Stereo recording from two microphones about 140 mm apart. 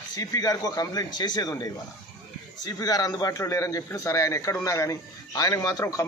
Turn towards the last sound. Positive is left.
turn(degrees=25)  # may be behind; listen again after turning